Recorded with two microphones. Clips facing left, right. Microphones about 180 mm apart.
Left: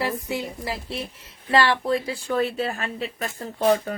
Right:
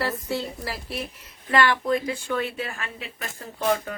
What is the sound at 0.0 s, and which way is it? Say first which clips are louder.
A woman's voice: left 1 dB; 15° left (ahead or behind).